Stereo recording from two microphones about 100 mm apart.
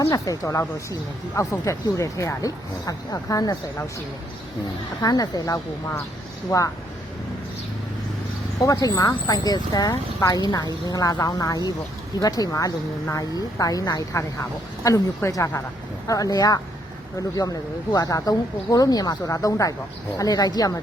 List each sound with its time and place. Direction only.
0.0 s speech: 35° left (ahead or behind)
5.0 s speech: 40° left (ahead or behind)
8.5 s speech: 35° left (ahead or behind)